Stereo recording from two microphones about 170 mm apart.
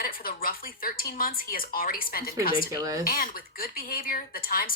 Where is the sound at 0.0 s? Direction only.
60° left (ahead or behind).